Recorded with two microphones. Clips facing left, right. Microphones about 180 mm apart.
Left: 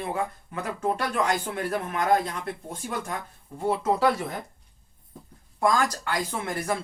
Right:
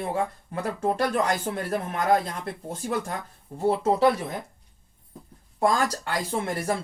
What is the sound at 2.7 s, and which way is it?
Speech, 30° right (ahead or behind).